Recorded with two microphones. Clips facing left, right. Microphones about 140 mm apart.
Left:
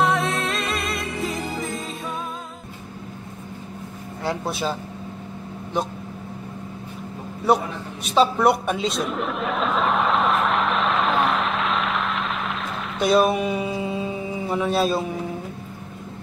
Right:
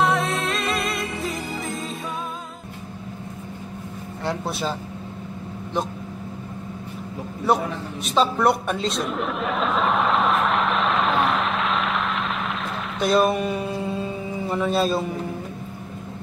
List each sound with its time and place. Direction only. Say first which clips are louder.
0.0 s music: even; centre (ahead or behind)
4.2 s a man's voice: left 1 dB; centre (ahead or behind)
8.0 s a sound: left 2 dB; 5° left (ahead or behind)